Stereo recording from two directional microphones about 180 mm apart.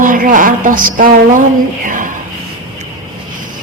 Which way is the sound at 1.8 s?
45° right (ahead or behind).